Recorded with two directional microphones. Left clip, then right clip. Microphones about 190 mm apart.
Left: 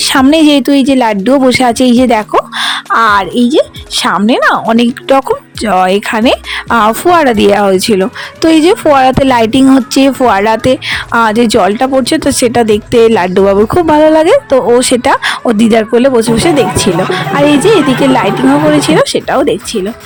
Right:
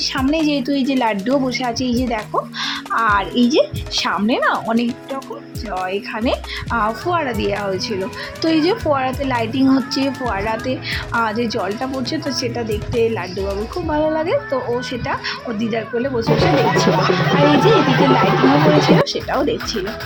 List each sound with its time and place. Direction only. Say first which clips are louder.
0.1 s a woman's voice: left 15 dB; 45° left (ahead or behind)
5.7 s a woman's voice: left 14 dB; 50° left (ahead or behind)